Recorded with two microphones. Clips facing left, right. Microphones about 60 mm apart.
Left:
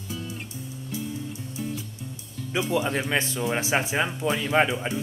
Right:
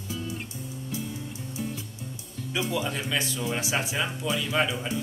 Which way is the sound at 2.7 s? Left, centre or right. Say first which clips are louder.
Left 6 dB; left.